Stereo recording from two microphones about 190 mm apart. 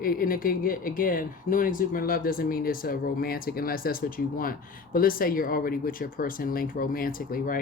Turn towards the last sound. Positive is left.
turn(degrees=50)  # may be behind; listen again after turning